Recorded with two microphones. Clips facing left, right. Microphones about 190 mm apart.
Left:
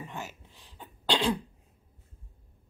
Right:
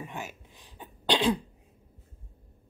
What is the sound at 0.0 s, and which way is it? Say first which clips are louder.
Cough: right 1 dB; 15° right (ahead or behind).